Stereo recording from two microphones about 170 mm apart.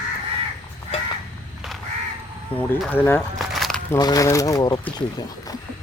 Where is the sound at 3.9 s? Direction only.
20° left (ahead or behind).